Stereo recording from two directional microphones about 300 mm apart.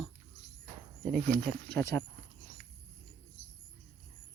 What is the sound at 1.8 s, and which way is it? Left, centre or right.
Speech, centre.